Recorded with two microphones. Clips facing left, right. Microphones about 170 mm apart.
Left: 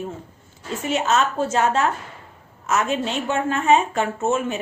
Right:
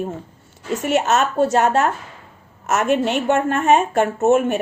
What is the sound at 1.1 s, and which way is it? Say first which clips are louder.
Speech: right 4 dB; 40° right (ahead or behind).